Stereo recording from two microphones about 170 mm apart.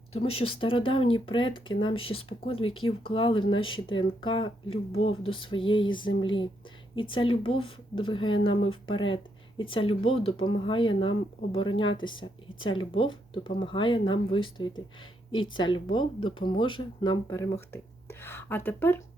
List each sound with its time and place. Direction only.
0.1 s speech: 35° left (ahead or behind); by 19.0 s 10° left (ahead or behind)